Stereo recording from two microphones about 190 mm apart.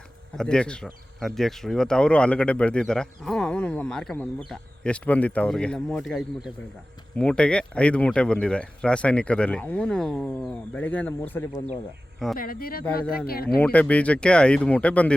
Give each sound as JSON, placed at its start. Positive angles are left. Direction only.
{"t": 0.3, "sound": "speech", "side_deg": 5}
{"t": 12.4, "sound": "speech", "side_deg": 50}
{"t": 13.6, "sound": "speech", "side_deg": 5}